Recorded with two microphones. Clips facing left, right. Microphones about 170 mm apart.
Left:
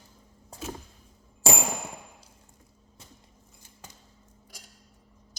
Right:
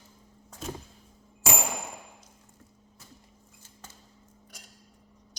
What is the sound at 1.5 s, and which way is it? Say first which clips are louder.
Clang: left 3 dB; 30° left (ahead or behind).